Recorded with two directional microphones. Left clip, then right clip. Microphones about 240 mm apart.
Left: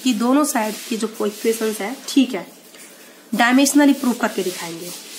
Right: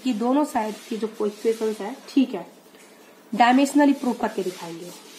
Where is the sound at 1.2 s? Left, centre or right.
Left.